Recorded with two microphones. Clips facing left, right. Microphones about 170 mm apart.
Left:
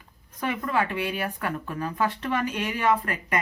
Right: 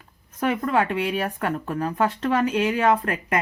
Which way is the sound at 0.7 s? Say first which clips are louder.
Right 2 dB; 60° right (ahead or behind).